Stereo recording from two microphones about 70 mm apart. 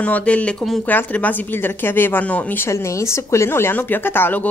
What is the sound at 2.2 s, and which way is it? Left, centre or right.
Speech, left.